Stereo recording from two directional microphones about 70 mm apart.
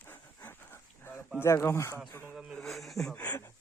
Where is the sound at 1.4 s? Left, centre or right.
Left.